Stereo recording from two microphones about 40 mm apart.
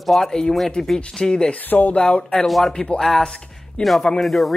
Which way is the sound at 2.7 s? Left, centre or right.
Left.